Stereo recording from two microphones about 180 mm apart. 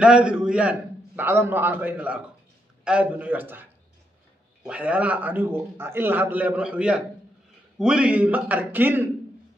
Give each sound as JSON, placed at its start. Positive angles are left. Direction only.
{"t": 0.0, "sound": "a man's voice", "side_deg": -5}
{"t": 4.6, "sound": "a man's voice", "side_deg": -5}